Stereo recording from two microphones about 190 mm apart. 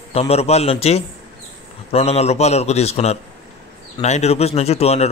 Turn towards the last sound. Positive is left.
turn(degrees=35)  # may be behind; listen again after turning